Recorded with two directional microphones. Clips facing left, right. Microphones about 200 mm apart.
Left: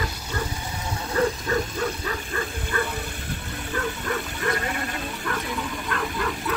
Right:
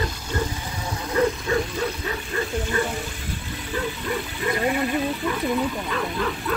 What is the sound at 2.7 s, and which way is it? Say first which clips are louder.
Bow-wow: right 1 dB; 20° right (ahead or behind).